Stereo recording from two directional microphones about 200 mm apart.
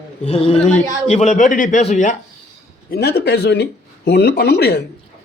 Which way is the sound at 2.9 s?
50° left (ahead or behind).